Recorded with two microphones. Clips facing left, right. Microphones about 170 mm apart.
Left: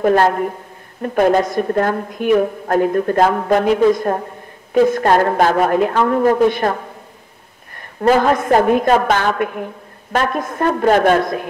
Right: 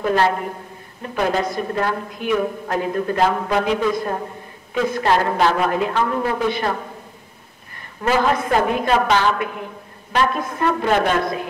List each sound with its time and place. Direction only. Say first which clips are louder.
0.0 s a woman's voice: left 5 dB; 50° left (ahead or behind)
8.0 s a woman's voice: left 5 dB; 45° left (ahead or behind)